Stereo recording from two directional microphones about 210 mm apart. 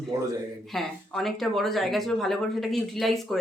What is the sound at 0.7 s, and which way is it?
A woman's voice, centre (ahead or behind).